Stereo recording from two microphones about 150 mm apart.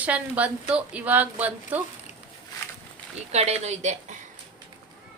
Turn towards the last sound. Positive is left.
turn(degrees=-50)  # may be behind; listen again after turning